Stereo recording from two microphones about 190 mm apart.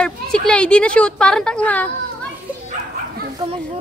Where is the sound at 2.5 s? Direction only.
5° right (ahead or behind).